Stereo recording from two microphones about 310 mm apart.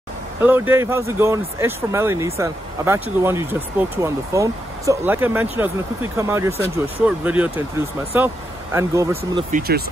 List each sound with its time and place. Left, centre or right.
0.4 s speech: centre
9.5 s speech: right